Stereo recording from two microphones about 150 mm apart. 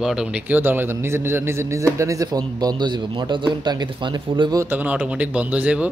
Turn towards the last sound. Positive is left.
turn(degrees=-10)  # may be behind; listen again after turning